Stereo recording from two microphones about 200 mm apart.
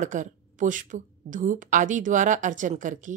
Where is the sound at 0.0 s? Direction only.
40° right (ahead or behind).